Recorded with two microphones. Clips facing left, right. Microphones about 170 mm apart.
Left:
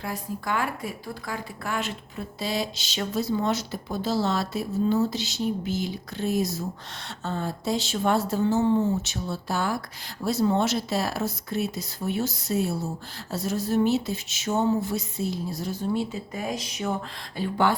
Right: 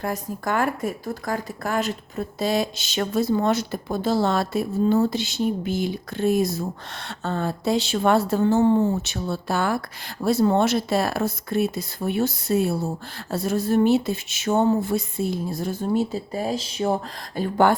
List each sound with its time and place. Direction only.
0.0 s speech: 45° right (ahead or behind)